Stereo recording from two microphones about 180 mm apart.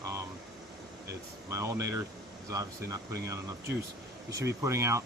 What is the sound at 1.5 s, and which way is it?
Speech, 15° right (ahead or behind).